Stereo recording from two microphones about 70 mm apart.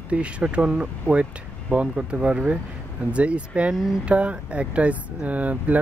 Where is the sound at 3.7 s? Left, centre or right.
Centre.